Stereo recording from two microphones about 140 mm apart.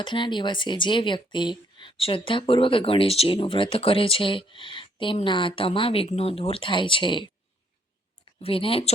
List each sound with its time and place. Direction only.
0.0 s speech: 35° left (ahead or behind)
8.4 s speech: 45° left (ahead or behind)